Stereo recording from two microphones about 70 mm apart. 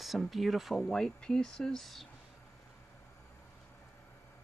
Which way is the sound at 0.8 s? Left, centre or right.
Centre.